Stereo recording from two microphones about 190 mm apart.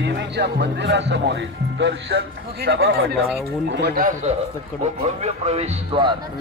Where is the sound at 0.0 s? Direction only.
65° right (ahead or behind).